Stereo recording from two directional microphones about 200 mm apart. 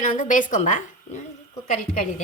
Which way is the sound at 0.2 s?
40° left (ahead or behind).